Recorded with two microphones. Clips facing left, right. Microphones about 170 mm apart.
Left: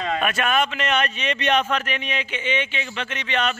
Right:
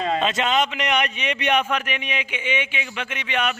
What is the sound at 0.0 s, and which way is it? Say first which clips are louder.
A man's voice: right 1 dB; 25° right (ahead or behind).